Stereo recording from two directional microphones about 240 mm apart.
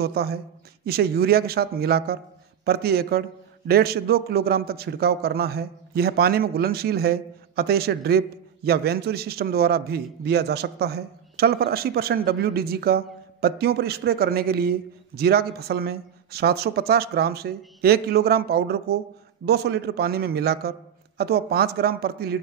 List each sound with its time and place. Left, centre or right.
0.0 s a man's voice: right